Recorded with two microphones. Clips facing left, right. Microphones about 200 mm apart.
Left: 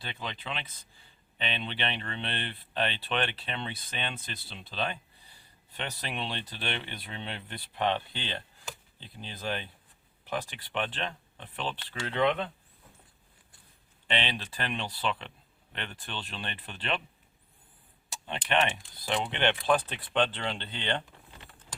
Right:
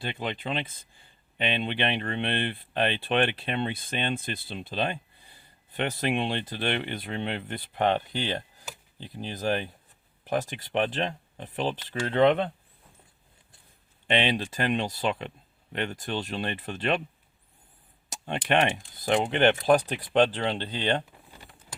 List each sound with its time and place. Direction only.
0.0 s speech: 55° right (ahead or behind)
14.1 s speech: 45° right (ahead or behind)
18.1 s speech: 45° right (ahead or behind)